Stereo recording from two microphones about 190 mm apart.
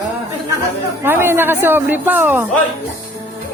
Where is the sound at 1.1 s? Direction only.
10° right (ahead or behind).